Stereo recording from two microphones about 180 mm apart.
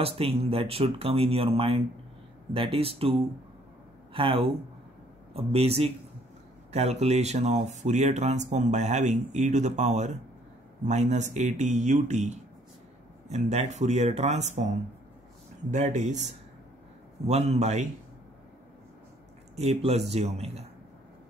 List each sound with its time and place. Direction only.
0.0 s speech: 30° right (ahead or behind)
19.5 s speech: 35° right (ahead or behind)